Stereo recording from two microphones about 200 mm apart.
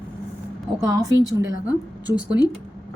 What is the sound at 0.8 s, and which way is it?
Speech, 15° right (ahead or behind).